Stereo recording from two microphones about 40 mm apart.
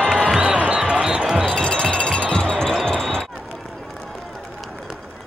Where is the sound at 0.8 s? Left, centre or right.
Right.